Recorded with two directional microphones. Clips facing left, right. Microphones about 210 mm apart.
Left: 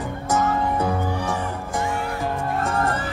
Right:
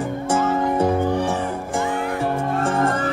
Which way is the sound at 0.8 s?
15° right (ahead or behind).